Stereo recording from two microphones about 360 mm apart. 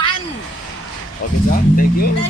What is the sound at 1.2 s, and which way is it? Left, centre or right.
Speech, left.